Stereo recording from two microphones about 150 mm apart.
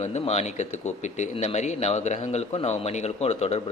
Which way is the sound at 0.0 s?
50° left (ahead or behind).